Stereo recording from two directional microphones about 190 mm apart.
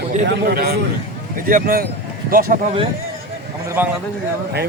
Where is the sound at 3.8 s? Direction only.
10° right (ahead or behind).